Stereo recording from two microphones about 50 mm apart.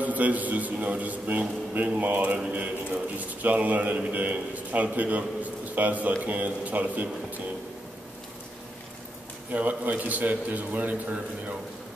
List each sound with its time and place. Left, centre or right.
0.0 s a man's voice: right
3.4 s a man's voice: right
9.5 s a man's voice: right